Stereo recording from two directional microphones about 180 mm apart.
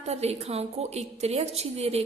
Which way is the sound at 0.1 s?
35° right (ahead or behind).